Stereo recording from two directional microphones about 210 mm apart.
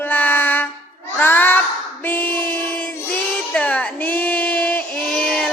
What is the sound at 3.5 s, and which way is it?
Child singing, 5° left (ahead or behind).